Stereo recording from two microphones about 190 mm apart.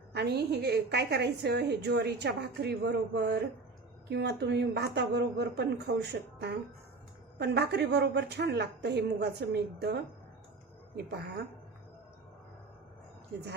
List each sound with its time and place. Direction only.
0.1 s a woman's voice: 60° right (ahead or behind)